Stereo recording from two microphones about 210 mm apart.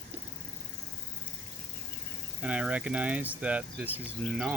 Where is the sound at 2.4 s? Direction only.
5° right (ahead or behind).